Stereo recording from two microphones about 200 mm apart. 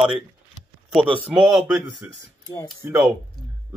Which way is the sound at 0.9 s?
25° right (ahead or behind).